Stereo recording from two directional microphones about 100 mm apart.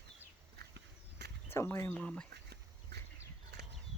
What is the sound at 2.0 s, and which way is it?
Speech, 10° left (ahead or behind).